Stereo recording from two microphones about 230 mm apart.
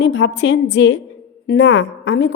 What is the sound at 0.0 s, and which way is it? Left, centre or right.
A woman's voice, left.